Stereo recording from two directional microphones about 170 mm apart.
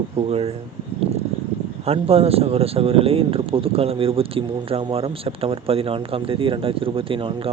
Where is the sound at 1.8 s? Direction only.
35° right (ahead or behind).